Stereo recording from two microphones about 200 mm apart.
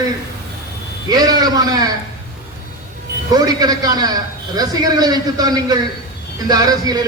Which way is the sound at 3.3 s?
20° right (ahead or behind).